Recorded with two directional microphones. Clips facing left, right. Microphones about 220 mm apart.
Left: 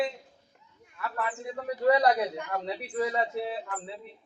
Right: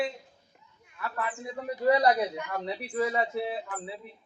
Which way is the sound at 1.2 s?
Centre (ahead or behind).